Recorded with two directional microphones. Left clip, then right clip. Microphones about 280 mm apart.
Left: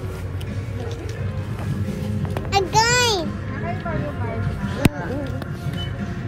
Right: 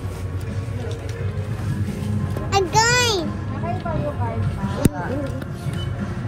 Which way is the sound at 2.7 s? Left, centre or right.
Centre.